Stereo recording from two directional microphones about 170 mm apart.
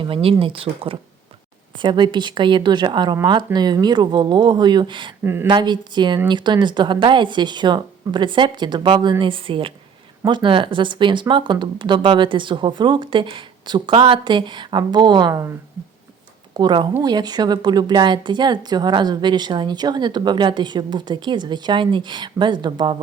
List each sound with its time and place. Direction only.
0.0 s a woman's voice: 35° right (ahead or behind)
5.2 s speech: 15° right (ahead or behind)
5.5 s a woman's voice: 25° right (ahead or behind)
16.6 s a woman's voice: 25° right (ahead or behind)